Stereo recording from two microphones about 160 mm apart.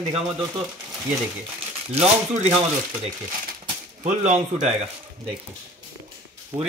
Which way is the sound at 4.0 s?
45° right (ahead or behind).